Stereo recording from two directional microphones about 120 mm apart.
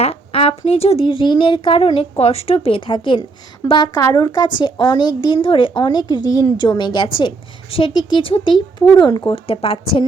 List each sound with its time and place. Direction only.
0.0 s a woman's voice: 55° left (ahead or behind)